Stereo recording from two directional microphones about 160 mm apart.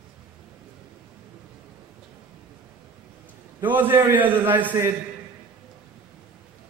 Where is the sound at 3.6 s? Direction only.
10° right (ahead or behind).